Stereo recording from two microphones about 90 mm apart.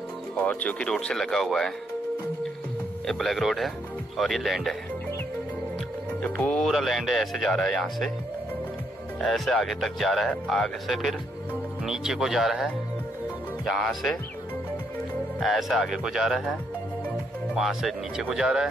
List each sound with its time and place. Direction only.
0.4 s speech: 15° left (ahead or behind)
3.1 s speech: 5° left (ahead or behind)
6.2 s speech: 15° left (ahead or behind)
6.6 s speech: centre (ahead or behind)
9.2 s speech: 5° left (ahead or behind)
15.4 s speech: centre (ahead or behind)
17.6 s speech: 5° right (ahead or behind)